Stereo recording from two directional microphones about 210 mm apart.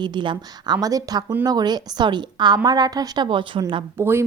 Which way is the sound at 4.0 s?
10° right (ahead or behind).